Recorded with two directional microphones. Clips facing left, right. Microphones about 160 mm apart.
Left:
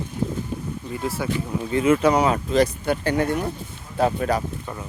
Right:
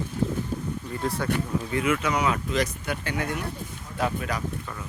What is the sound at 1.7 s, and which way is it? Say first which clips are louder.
Speech: left 8 dB; 30° left (ahead or behind).